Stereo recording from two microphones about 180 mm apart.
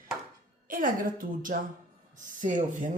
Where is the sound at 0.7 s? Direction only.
50° right (ahead or behind).